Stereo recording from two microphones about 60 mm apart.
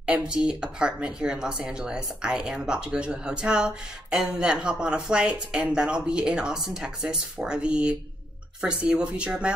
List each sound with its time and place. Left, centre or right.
0.0 s speech: centre